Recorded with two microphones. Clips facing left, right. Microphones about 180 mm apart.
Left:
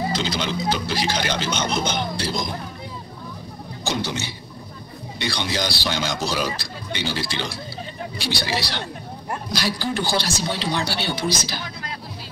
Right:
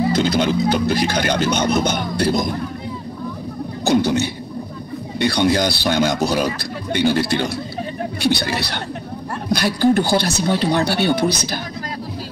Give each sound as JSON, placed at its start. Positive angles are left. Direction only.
{"t": 0.1, "sound": "a man's voice", "side_deg": -50}
{"t": 1.8, "sound": "music", "side_deg": -50}
{"t": 3.8, "sound": "music", "side_deg": -60}
{"t": 5.2, "sound": "a man's voice", "side_deg": -50}